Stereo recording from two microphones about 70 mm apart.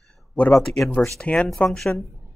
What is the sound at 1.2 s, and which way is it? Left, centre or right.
Speech, centre.